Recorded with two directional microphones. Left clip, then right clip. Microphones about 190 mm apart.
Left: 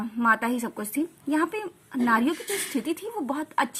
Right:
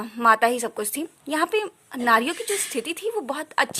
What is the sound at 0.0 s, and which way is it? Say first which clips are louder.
A woman's voice: right 5 dB; 45° right (ahead or behind).